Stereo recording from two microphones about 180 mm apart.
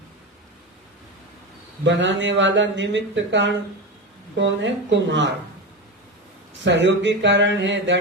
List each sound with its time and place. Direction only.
1.8 s speech: 80° right
6.7 s speech: 80° right